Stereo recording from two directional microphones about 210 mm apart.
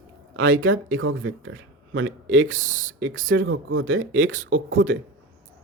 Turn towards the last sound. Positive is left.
turn(degrees=-65)  # may be behind; listen again after turning